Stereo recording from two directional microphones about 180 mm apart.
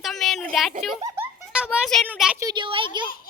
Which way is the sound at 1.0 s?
10° right (ahead or behind).